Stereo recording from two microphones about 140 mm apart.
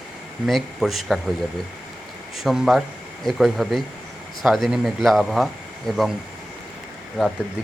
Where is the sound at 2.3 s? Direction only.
Centre (ahead or behind).